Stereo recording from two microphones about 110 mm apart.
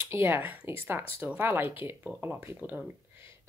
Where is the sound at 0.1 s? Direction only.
20° right (ahead or behind).